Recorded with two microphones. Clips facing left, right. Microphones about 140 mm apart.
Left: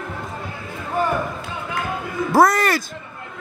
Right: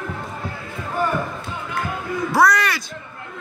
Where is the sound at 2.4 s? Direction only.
45° left (ahead or behind).